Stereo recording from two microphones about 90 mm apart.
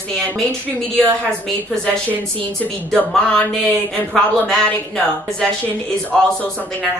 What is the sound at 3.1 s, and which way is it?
A woman's voice, 15° left (ahead or behind).